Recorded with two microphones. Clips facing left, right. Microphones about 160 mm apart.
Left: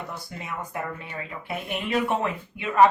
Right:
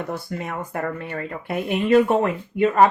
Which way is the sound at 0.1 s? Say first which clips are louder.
Right 7 dB; 55° right (ahead or behind).